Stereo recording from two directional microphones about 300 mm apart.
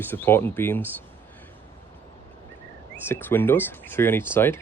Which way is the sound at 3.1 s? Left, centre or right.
Centre.